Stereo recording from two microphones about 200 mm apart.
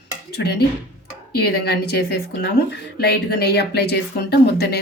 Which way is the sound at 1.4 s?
55° left (ahead or behind).